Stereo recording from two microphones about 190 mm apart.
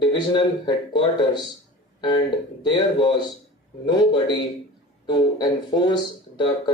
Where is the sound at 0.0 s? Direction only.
25° left (ahead or behind).